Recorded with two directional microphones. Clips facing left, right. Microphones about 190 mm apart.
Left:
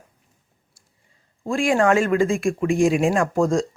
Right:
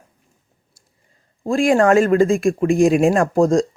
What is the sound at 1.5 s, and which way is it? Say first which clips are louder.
Speech: right 4 dB; 40° right (ahead or behind).